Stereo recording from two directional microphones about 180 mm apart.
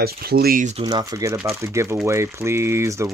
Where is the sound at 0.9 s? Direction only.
20° right (ahead or behind).